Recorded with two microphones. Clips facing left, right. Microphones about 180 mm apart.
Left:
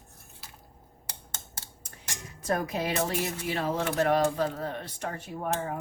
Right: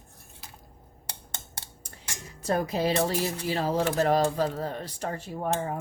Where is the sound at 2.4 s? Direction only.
30° right (ahead or behind).